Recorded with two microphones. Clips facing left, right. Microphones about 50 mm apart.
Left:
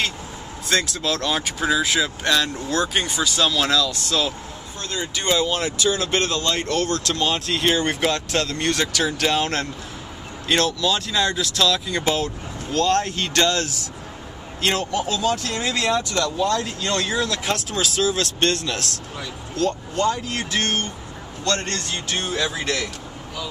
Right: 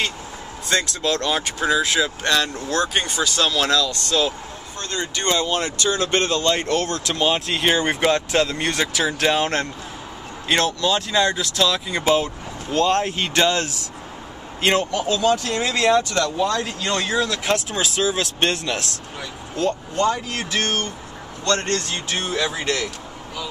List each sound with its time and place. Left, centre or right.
0.7 s speech: centre
12.7 s speech: centre